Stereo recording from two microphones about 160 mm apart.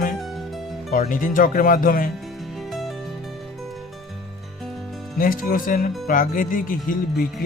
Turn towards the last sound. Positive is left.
turn(degrees=60)  # may be behind; listen again after turning